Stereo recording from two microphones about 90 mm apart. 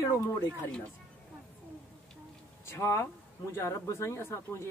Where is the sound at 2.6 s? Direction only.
30° left (ahead or behind).